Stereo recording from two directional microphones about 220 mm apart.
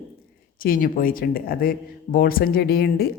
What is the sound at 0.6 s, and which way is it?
Speech, 40° left (ahead or behind).